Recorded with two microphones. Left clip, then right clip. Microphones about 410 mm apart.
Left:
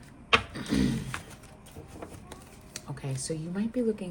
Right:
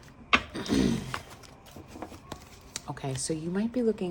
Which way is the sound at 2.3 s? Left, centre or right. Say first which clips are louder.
Right 3 dB; centre.